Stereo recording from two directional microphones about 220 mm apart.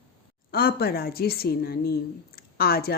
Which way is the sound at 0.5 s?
45° left (ahead or behind).